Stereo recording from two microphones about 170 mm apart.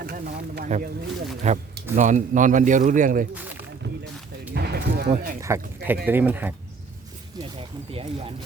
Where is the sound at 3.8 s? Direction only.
75° right (ahead or behind).